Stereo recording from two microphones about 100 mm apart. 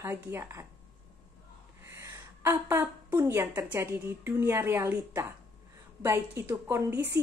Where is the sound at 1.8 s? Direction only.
25° right (ahead or behind).